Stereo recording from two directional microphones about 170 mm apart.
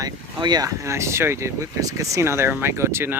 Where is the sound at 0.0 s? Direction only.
25° right (ahead or behind).